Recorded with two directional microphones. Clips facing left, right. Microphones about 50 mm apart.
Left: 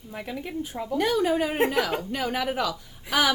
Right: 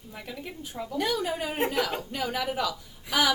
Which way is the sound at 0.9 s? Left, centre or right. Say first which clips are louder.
Left 6 dB; left.